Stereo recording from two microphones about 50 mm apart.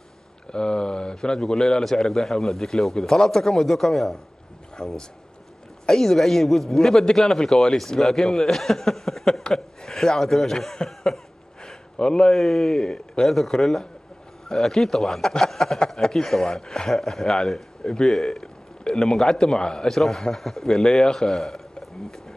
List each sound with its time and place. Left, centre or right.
0.5 s a man's voice: centre
11.6 s a sound: centre
12.3 s a man's voice: centre